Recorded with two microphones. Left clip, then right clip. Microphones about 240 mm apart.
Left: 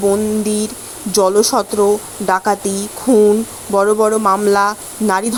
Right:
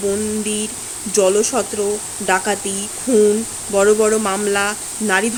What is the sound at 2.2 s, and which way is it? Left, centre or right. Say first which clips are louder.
Speech: left 3 dB; centre.